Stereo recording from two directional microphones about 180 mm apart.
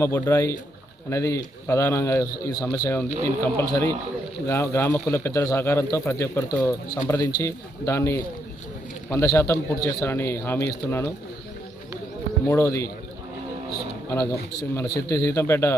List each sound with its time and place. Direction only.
0.0 s a man's voice: 15° left (ahead or behind)
12.5 s a man's voice: 15° left (ahead or behind)
14.1 s a man's voice: 15° left (ahead or behind)